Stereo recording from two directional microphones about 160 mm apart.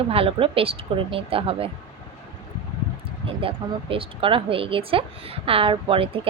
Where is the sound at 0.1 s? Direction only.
35° right (ahead or behind).